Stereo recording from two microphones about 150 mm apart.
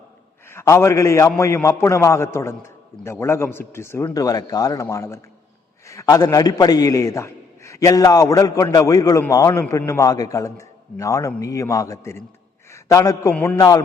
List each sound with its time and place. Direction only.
0.4 s a man's voice: 20° left (ahead or behind)
13.3 s a man's voice: 10° left (ahead or behind)
13.6 s a man's voice: 25° left (ahead or behind)